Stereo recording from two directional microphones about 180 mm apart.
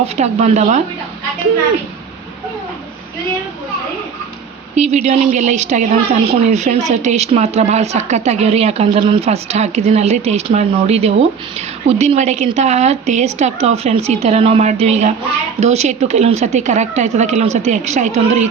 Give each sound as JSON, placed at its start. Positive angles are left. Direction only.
{"t": 0.0, "sound": "a woman's voice", "side_deg": -35}
{"t": 4.7, "sound": "a woman's voice", "side_deg": -40}